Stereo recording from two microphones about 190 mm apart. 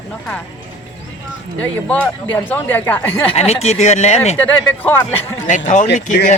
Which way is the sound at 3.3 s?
35° left (ahead or behind).